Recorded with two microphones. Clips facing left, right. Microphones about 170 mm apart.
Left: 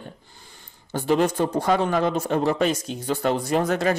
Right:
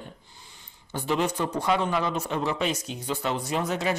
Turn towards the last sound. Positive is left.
turn(degrees=50)  # may be behind; listen again after turning